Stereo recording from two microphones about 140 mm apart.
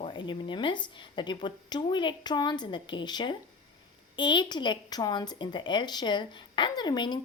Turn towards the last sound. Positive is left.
turn(degrees=30)  # may be behind; listen again after turning